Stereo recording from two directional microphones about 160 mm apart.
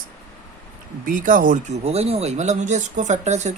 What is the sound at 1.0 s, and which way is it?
A woman's voice, 60° right (ahead or behind).